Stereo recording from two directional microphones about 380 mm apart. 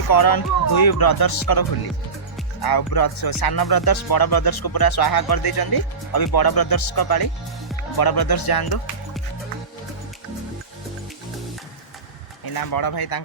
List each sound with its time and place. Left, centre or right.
0.1 s speech: left
12.5 s speech: left